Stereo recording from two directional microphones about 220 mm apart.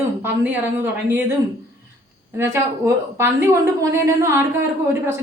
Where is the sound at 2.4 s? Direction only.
10° right (ahead or behind).